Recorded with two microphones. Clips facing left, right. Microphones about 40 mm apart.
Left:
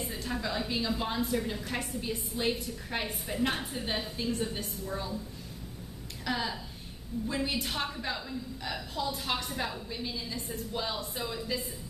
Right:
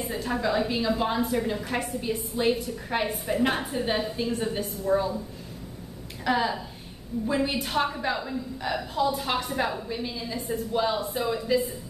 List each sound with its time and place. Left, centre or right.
0.0 s a woman's voice: centre
6.2 s a woman's voice: centre